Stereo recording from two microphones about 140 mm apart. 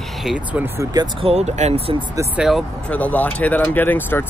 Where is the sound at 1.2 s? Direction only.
50° right (ahead or behind).